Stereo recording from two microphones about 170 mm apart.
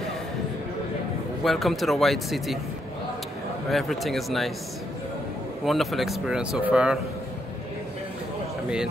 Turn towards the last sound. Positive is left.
turn(degrees=-5)  # may be behind; listen again after turning